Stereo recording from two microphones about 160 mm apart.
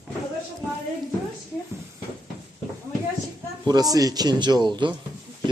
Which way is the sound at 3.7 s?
25° right (ahead or behind).